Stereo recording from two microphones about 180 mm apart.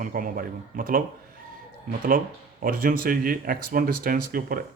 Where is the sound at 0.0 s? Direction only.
50° right (ahead or behind).